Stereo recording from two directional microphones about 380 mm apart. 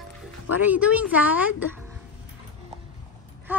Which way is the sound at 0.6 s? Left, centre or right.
Centre.